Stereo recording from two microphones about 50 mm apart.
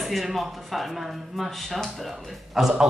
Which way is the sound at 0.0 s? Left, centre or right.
Centre.